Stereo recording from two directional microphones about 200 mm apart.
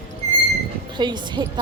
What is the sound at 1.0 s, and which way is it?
Speech, 20° right (ahead or behind).